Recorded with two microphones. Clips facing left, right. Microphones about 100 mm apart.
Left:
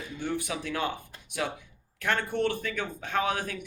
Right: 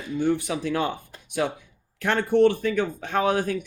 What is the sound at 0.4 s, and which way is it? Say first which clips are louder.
Speech: right 6 dB; 30° right (ahead or behind).